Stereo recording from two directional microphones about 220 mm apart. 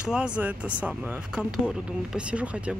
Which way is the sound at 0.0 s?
5° right (ahead or behind).